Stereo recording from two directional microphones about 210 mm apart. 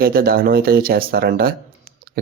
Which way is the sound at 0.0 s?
45° right (ahead or behind).